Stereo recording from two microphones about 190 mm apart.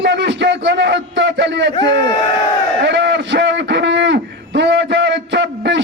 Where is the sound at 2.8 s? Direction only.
65° right (ahead or behind).